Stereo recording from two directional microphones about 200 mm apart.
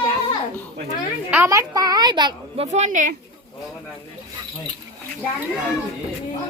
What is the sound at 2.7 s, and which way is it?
Speech, 35° right (ahead or behind).